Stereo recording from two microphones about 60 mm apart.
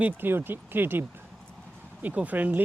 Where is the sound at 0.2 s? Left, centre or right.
Right.